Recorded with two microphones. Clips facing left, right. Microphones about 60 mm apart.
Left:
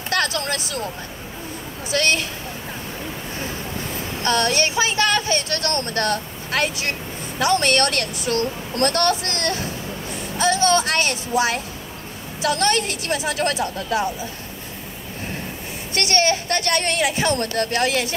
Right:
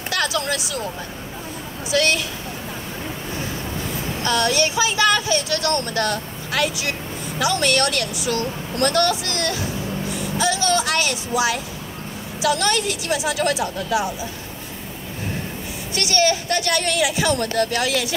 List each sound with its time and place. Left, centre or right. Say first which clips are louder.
0.1 s vehicle: even; left
1.9 s speech: right 1 dB; left
4.2 s speech: even; left
15.9 s speech: even; left